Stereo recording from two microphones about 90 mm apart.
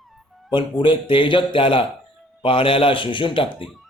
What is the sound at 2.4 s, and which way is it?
A man's voice, 90° left.